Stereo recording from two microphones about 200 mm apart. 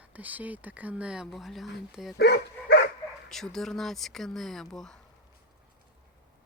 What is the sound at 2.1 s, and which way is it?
Dog, 55° left (ahead or behind).